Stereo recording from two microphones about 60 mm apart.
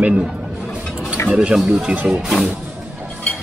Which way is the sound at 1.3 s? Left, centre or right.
Centre.